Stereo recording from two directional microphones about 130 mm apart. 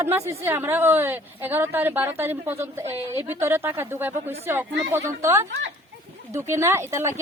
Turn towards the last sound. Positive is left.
turn(degrees=-20)  # may be behind; listen again after turning